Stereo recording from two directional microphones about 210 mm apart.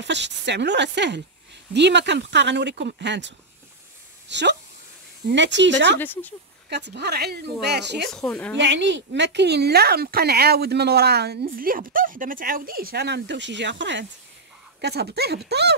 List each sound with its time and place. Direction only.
0.0 s speech: 55° right (ahead or behind)
5.9 s speech: 10° left (ahead or behind)
6.7 s a woman's voice: 55° right (ahead or behind)
8.1 s a woman's voice: 5° left (ahead or behind)
8.5 s a woman's voice: 60° right (ahead or behind)